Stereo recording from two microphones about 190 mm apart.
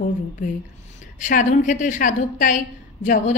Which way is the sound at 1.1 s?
45° left (ahead or behind).